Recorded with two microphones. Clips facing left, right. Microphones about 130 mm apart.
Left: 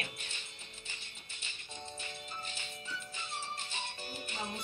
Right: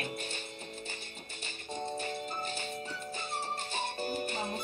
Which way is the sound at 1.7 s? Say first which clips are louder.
Right 11 dB; 45° right (ahead or behind).